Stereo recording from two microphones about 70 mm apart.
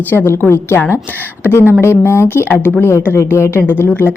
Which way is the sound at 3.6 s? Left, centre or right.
Left.